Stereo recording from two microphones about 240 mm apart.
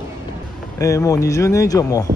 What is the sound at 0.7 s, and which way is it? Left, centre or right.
Speech, centre.